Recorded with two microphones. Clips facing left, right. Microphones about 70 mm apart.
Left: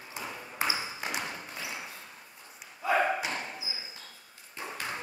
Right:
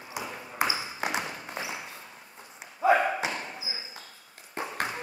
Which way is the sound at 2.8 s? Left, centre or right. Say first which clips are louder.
Right 6 dB; right.